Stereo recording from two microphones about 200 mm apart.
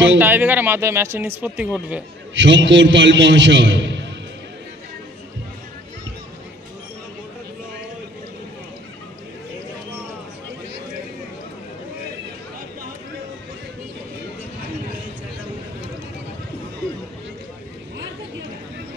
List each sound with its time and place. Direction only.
0.2 s speech: 10° right (ahead or behind)
2.3 s a man's voice: 65° right (ahead or behind)